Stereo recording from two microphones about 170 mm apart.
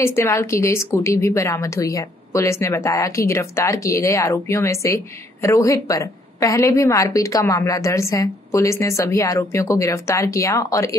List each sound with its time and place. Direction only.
0.0 s a woman's voice: 15° left (ahead or behind)